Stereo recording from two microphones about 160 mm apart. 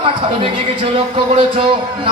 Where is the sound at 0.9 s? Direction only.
35° right (ahead or behind).